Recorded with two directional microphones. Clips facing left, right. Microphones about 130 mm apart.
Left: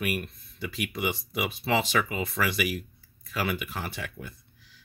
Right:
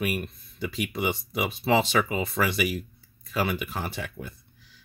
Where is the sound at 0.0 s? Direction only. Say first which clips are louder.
Right 2 dB; 25° right (ahead or behind).